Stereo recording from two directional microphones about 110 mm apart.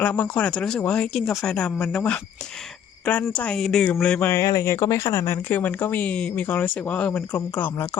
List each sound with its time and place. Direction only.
0.0 s speech: 15° left (ahead or behind)
3.3 s speech: 10° left (ahead or behind)
3.8 s speech: 15° left (ahead or behind)